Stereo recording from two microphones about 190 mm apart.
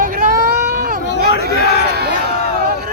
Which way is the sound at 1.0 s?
65° left (ahead or behind).